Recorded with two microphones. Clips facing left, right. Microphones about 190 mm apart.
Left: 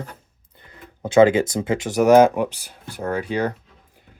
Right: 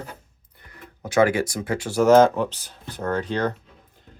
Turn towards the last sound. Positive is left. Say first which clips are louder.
# left 1 dB
turn(degrees=10)  # may be behind; listen again after turning